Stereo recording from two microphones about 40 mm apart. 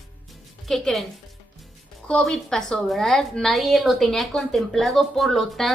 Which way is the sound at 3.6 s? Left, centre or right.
Centre.